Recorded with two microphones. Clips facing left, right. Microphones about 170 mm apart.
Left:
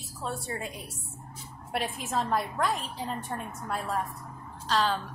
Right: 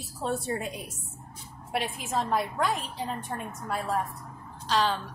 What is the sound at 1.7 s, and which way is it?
A woman's voice, centre (ahead or behind).